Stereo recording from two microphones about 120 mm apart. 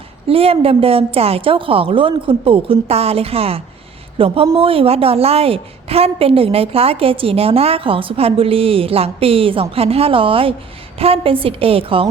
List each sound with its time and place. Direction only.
0.3 s a woman's voice: 55° right (ahead or behind)